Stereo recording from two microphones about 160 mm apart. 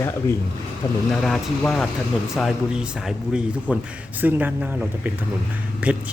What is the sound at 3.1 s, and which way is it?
Speech, 5° right (ahead or behind).